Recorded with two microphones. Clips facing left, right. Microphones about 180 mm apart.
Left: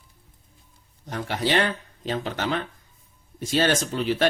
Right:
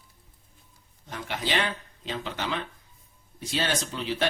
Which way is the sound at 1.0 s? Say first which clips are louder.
Left 6 dB; 40° left (ahead or behind).